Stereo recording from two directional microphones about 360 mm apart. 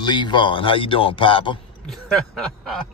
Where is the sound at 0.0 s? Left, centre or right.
Centre.